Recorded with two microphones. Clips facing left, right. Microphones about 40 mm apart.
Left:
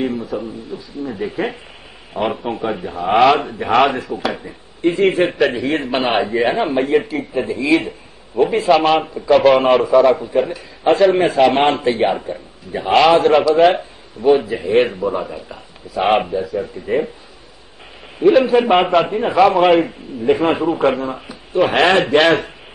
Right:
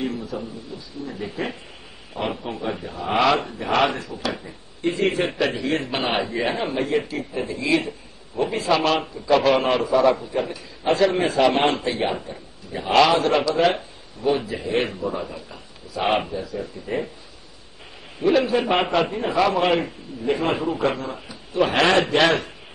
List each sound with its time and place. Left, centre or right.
0.0 s speech: centre
18.4 s speech: left
18.7 s a man's voice: centre
19.0 s speech: left
19.3 s speech: centre
19.8 s speech: left